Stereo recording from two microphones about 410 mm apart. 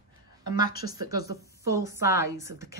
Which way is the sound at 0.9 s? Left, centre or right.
Centre.